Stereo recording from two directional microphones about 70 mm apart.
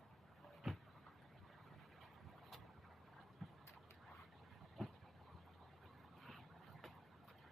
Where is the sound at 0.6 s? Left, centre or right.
Centre.